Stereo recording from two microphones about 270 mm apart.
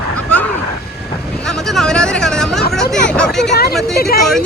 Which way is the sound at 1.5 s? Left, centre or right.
Centre.